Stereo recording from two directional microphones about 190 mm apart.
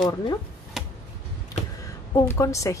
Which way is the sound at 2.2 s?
15° left (ahead or behind).